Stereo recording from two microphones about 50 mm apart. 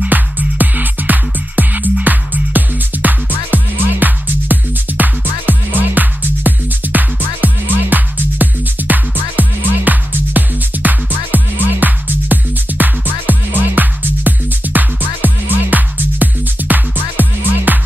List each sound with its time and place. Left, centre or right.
0.1 s music: right